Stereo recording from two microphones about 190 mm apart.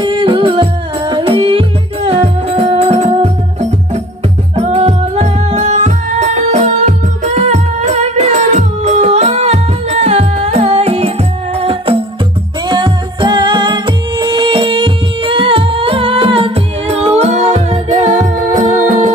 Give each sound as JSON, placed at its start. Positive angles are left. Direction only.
{"t": 0.0, "sound": "music", "side_deg": -25}
{"t": 4.6, "sound": "music", "side_deg": -35}